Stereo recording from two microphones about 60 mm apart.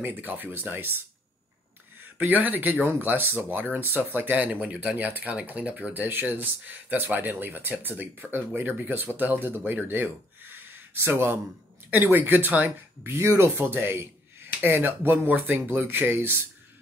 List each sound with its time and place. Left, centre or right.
0.0 s speech: right
2.1 s speech: right
13.0 s speech: right